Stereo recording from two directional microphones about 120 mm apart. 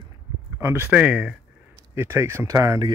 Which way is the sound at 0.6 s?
20° right (ahead or behind).